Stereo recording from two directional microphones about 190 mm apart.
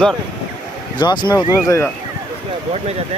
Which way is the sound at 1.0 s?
25° left (ahead or behind).